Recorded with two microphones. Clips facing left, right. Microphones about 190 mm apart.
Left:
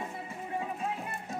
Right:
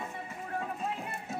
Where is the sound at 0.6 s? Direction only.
Centre (ahead or behind).